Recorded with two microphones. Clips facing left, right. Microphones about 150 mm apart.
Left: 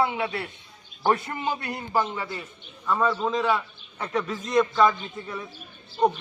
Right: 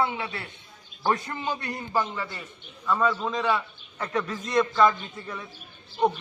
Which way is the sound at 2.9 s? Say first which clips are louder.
Left 2 dB; 5° left (ahead or behind).